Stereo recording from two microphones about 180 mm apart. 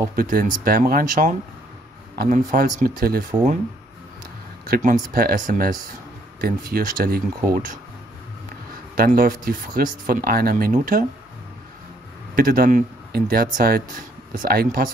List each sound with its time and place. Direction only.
0.1 s speech: 55° right (ahead or behind)
4.6 s speech: 50° right (ahead or behind)
8.9 s speech: 55° right (ahead or behind)
12.4 s speech: 55° right (ahead or behind)